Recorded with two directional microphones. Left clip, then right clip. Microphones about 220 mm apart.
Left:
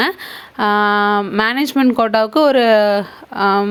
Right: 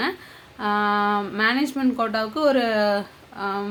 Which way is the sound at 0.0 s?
45° left (ahead or behind).